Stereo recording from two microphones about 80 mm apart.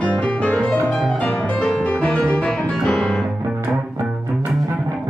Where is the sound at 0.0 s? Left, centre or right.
Centre.